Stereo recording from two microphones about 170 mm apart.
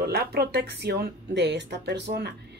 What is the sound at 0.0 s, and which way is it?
Speech, 70° right (ahead or behind).